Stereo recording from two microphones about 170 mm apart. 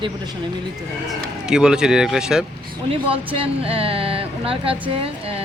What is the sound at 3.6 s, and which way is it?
Speech, 35° right (ahead or behind).